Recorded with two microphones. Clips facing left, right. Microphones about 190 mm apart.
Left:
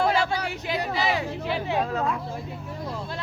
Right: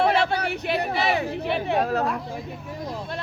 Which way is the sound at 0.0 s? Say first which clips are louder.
Right 2 dB; 65° right (ahead or behind).